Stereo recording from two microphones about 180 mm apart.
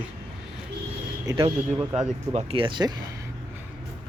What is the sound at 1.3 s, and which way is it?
Speech, 25° right (ahead or behind).